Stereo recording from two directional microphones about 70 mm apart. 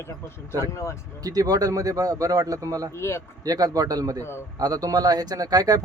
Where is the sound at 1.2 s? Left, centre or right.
Right.